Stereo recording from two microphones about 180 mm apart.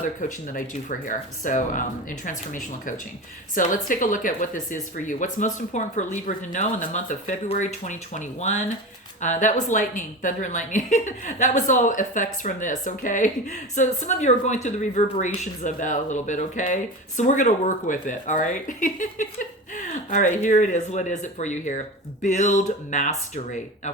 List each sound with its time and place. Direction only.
0.2 s speech: 45° left (ahead or behind)